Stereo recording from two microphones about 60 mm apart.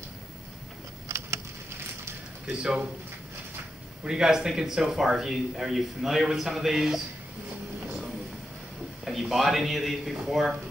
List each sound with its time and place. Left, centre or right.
1.0 s a sound: right
2.6 s speech: centre
4.0 s speech: centre
9.0 s speech: centre